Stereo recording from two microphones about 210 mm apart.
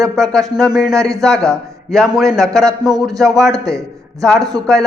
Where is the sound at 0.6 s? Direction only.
Centre (ahead or behind).